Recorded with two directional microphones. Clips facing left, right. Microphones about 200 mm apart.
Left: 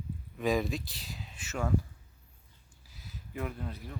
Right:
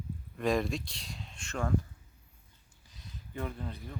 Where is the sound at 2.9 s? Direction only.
5° left (ahead or behind).